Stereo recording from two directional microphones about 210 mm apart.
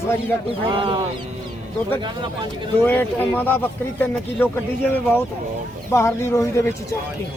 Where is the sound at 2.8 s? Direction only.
10° left (ahead or behind).